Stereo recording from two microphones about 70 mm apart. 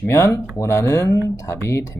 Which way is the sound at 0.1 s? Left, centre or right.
Left.